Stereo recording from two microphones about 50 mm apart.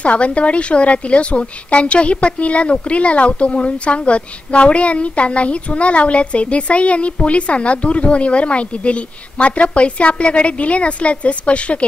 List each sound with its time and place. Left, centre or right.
0.0 s a woman's voice: left